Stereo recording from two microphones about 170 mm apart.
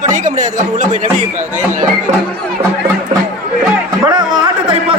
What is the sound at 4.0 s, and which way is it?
Music, 25° right (ahead or behind).